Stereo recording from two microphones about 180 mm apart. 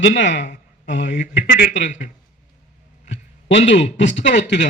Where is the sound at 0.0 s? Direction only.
90° left.